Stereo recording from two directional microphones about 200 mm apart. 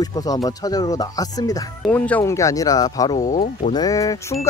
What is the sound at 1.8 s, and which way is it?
Speech, 5° left (ahead or behind).